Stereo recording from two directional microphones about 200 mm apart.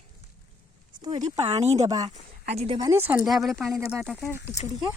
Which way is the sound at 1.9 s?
20° right (ahead or behind).